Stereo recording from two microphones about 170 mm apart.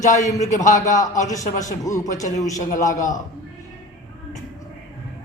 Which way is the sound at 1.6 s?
20° left (ahead or behind).